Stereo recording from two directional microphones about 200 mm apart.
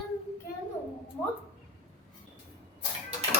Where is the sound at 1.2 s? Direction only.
5° left (ahead or behind).